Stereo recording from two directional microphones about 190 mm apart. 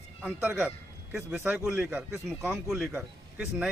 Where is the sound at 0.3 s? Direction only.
5° right (ahead or behind).